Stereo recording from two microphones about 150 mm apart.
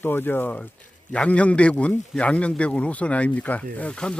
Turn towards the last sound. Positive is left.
turn(degrees=10)  # may be behind; listen again after turning